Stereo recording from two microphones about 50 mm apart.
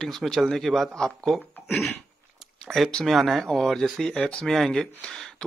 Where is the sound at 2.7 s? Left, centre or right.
Centre.